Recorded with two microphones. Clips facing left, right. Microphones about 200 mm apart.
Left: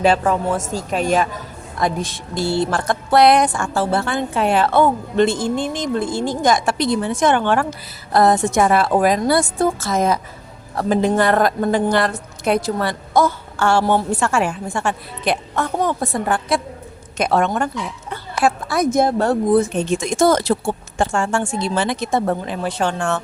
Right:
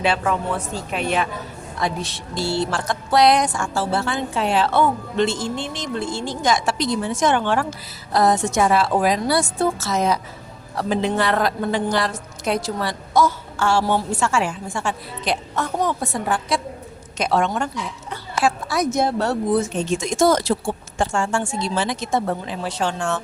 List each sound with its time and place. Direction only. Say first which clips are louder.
0.0 s a woman's voice: left 5 dB; 45° left (ahead or behind); by 23.2 s 60° left (ahead or behind)